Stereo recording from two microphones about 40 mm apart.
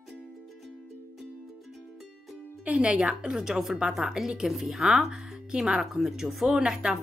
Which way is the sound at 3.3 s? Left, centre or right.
Centre.